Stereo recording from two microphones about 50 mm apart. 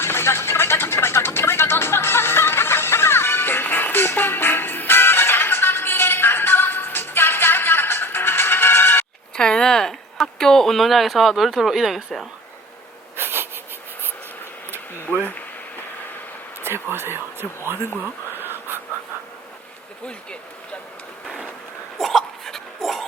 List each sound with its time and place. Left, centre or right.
0.0 s music: left
9.3 s a sound: centre
13.1 s wheeze: right
15.1 s speech: left
16.6 s speech: right
18.3 s a sound: right
21.9 s dog: centre